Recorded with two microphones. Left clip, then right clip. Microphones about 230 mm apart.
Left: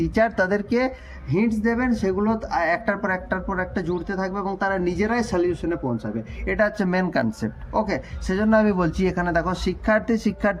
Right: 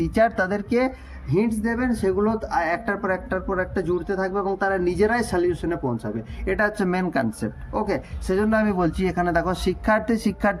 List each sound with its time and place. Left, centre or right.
0.0 s speech: centre